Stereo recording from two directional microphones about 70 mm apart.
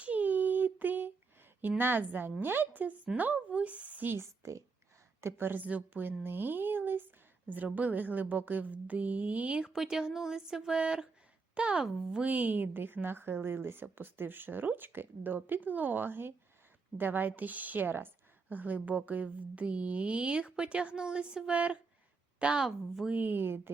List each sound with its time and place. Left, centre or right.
0.0 s child singing: right
1.8 s a woman's voice: right